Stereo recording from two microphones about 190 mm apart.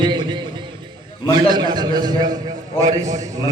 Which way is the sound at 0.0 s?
25° right (ahead or behind).